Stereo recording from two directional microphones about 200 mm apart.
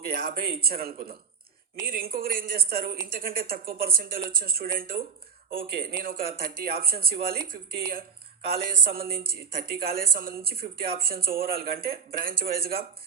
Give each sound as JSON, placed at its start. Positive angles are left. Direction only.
{"t": 0.0, "sound": "speech", "side_deg": -45}